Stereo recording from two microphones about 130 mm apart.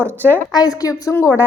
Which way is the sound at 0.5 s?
30° left (ahead or behind).